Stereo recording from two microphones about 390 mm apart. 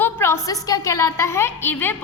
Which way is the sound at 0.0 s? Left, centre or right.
Centre.